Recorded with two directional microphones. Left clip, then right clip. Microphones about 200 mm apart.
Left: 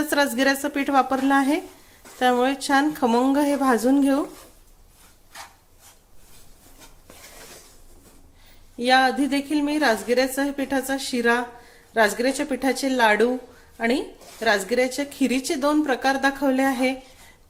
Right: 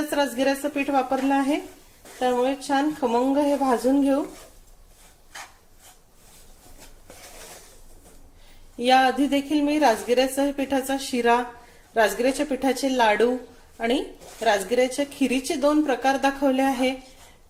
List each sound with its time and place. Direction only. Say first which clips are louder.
0.1 s a woman's voice: left 2 dB; 30° left (ahead or behind)
8.8 s a woman's voice: even; 10° left (ahead or behind)